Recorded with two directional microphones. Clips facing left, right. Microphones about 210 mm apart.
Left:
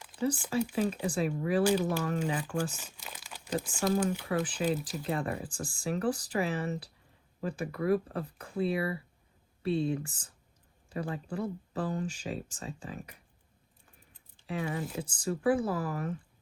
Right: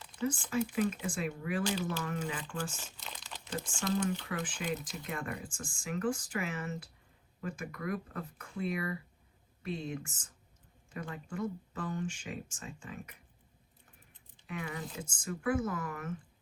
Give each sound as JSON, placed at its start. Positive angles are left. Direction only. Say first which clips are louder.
{"t": 0.2, "sound": "speech", "louder": "left 3 dB", "side_deg": 35}
{"t": 2.7, "sound": "speech", "louder": "left 1 dB", "side_deg": 10}
{"t": 4.4, "sound": "speech", "louder": "left 6 dB", "side_deg": 35}
{"t": 14.4, "sound": "speech", "louder": "left 6 dB", "side_deg": 35}